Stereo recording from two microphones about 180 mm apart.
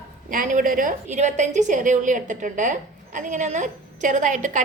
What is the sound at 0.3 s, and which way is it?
A woman's voice, 50° right (ahead or behind).